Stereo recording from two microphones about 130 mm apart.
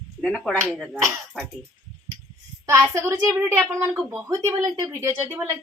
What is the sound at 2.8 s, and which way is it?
Speech, 20° right (ahead or behind).